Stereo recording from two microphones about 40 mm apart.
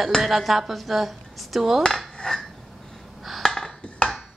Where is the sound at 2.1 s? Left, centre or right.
Centre.